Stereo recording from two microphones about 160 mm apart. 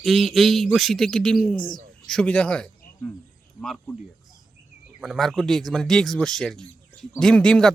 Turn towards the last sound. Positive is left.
turn(degrees=5)  # may be behind; listen again after turning